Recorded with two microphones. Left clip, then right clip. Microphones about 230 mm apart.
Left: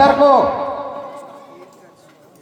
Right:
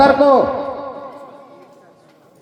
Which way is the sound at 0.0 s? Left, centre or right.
Right.